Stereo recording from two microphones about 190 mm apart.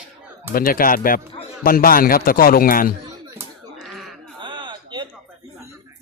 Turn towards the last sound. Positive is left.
turn(degrees=-25)  # may be behind; listen again after turning